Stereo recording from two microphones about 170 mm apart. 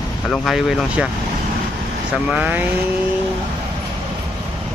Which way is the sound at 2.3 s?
10° right (ahead or behind).